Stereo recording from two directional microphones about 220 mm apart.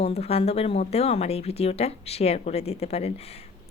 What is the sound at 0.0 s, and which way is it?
A woman's voice, 30° left (ahead or behind).